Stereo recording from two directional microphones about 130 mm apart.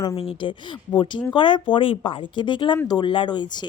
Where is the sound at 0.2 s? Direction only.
45° left (ahead or behind).